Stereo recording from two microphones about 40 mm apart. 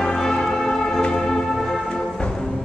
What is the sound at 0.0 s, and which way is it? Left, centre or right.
Music, centre.